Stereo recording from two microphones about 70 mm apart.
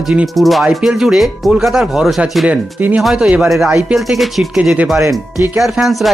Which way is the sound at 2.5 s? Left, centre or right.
Right.